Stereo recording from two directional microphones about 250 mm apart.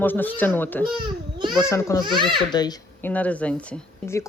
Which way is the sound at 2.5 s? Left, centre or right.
Centre.